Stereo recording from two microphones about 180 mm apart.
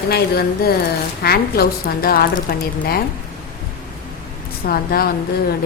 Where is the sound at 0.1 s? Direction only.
60° left (ahead or behind).